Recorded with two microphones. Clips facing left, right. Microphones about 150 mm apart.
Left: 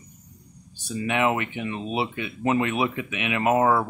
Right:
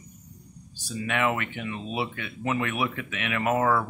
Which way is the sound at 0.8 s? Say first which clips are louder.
Left 3 dB; 20° left (ahead or behind).